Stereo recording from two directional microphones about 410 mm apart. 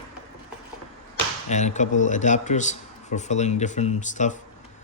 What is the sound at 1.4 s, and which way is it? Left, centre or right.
Speech, centre.